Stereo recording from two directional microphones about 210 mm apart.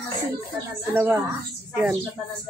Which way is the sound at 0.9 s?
10° right (ahead or behind).